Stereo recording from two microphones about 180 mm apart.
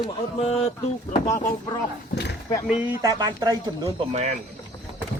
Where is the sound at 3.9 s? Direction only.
35° right (ahead or behind).